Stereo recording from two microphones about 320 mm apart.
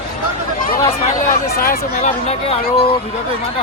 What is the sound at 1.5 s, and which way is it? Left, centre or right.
Speech, left.